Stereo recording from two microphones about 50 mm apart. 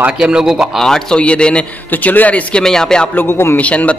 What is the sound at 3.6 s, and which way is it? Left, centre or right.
Speech, left.